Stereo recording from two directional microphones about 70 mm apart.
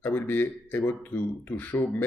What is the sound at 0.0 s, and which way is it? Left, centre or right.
Speech, left.